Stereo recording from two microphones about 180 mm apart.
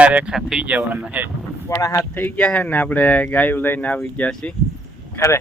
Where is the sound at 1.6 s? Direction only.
15° left (ahead or behind).